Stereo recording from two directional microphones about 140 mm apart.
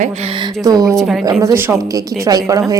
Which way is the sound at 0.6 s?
25° right (ahead or behind).